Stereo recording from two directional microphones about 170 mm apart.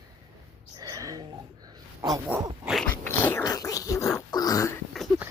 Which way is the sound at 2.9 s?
10° left (ahead or behind).